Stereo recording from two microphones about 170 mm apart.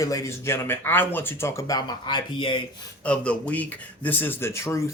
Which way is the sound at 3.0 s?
5° left (ahead or behind).